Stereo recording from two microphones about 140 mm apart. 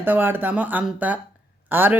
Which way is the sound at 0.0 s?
15° right (ahead or behind).